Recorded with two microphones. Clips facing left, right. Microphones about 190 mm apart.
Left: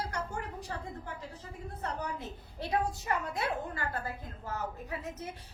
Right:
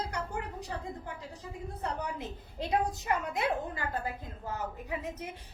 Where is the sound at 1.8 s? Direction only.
15° right (ahead or behind).